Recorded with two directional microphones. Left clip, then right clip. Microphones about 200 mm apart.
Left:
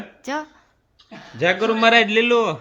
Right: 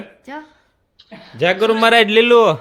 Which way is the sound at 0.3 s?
55° left (ahead or behind).